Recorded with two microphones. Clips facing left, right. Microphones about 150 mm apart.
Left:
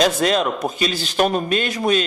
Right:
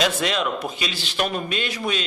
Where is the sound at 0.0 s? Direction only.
40° left (ahead or behind).